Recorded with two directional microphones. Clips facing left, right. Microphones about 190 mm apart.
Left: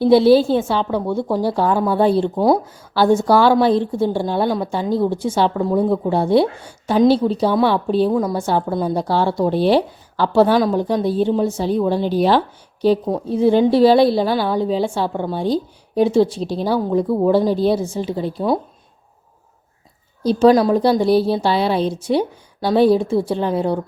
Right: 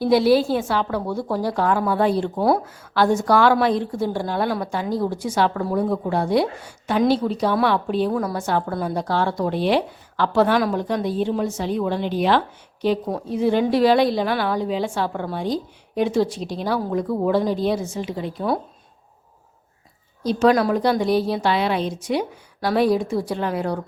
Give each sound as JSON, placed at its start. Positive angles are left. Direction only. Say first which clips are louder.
{"t": 0.0, "sound": "a woman's voice", "louder": "left 5 dB", "side_deg": 30}
{"t": 20.2, "sound": "speech", "louder": "left 5 dB", "side_deg": 30}